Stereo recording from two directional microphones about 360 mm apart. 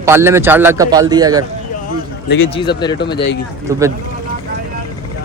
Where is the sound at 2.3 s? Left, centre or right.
Left.